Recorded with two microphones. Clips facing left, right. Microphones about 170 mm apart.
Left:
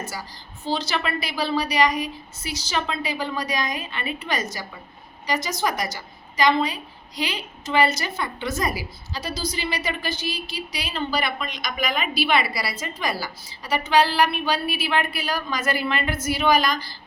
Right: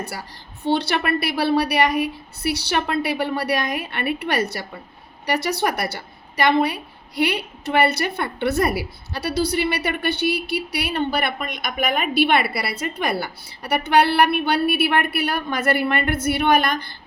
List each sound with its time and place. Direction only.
0.0 s a woman's voice: 60° right (ahead or behind)